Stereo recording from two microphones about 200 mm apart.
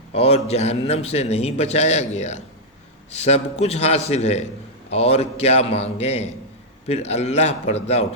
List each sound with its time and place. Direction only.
0.1 s a man's voice: 30° left (ahead or behind)